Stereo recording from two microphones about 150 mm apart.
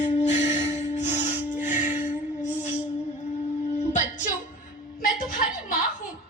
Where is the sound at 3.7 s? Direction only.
55° left (ahead or behind).